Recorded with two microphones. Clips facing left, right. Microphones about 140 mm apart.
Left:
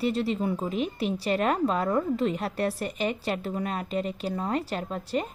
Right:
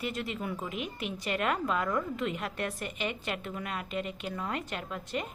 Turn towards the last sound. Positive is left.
turn(degrees=35)  # may be behind; listen again after turning